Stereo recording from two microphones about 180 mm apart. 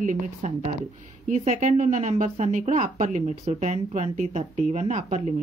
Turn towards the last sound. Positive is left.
turn(degrees=-40)  # may be behind; listen again after turning